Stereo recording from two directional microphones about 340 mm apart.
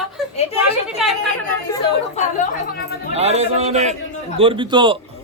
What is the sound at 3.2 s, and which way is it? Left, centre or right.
A man's voice, centre.